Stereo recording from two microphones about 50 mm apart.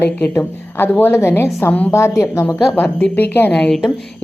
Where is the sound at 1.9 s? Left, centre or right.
Left.